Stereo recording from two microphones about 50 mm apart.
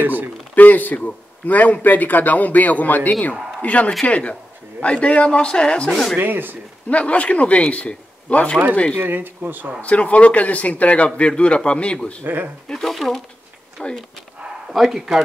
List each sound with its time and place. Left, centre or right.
0.0 s speech: right
0.6 s a man's voice: left; by 6.1 s centre
6.1 s speech: right
6.9 s speech: left
8.9 s speech: right
9.8 s speech: left
12.8 s speech: centre
13.8 s speech: centre
14.7 s speech: centre